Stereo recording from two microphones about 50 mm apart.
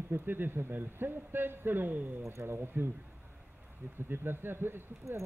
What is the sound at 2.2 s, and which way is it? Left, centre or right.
Speech, right.